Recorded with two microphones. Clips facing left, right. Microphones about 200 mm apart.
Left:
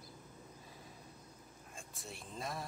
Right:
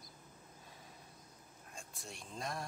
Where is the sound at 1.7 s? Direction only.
Centre (ahead or behind).